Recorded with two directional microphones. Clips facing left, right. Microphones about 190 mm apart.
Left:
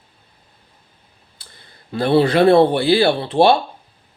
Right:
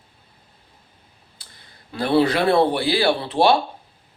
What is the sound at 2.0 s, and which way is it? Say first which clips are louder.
Speech: left 5 dB; 30° left (ahead or behind).